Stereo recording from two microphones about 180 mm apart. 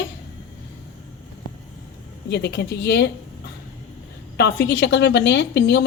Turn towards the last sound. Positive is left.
turn(degrees=70)  # may be behind; listen again after turning